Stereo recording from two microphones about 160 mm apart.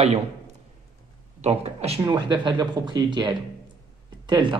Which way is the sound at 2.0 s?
30° right (ahead or behind).